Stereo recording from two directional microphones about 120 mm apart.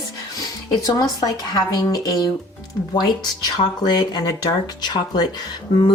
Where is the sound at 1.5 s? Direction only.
35° left (ahead or behind).